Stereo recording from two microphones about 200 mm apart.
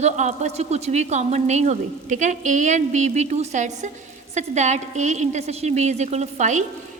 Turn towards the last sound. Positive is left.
turn(degrees=-35)  # may be behind; listen again after turning